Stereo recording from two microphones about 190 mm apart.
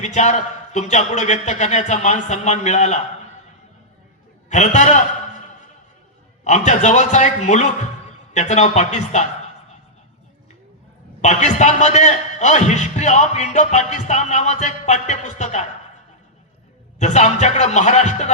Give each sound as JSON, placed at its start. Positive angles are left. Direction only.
{"t": 0.0, "sound": "a man's voice", "side_deg": 40}
{"t": 4.4, "sound": "a man's voice", "side_deg": 40}
{"t": 6.4, "sound": "a man's voice", "side_deg": 40}
{"t": 11.2, "sound": "a man's voice", "side_deg": 40}
{"t": 17.0, "sound": "a man's voice", "side_deg": 40}